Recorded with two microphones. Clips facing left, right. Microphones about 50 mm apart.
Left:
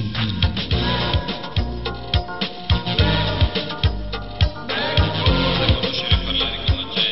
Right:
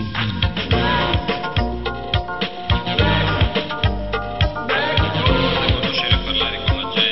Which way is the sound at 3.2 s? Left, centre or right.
Right.